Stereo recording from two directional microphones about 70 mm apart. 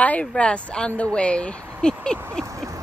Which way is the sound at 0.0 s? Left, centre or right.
Left.